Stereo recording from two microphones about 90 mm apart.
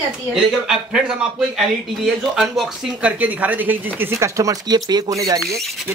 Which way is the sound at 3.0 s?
20° right (ahead or behind).